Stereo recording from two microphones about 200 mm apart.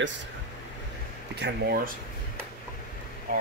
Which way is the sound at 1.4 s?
50° right (ahead or behind).